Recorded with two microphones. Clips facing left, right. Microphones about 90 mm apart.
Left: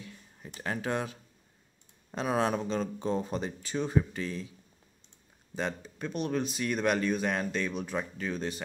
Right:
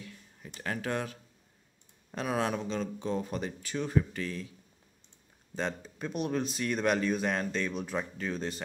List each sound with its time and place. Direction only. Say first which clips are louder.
0.0 s a sound: even; 25° left (ahead or behind)
0.6 s speech: left 1 dB; 25° left (ahead or behind)
5.6 s speech: even; 5° left (ahead or behind)